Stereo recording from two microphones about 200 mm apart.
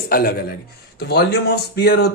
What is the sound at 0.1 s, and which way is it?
Speech, 50° left (ahead or behind).